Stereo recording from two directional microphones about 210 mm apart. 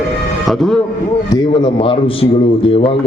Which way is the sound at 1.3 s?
20° left (ahead or behind).